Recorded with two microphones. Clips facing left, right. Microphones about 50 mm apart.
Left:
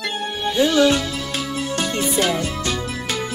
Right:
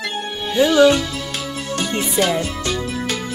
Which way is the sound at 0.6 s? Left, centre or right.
Centre.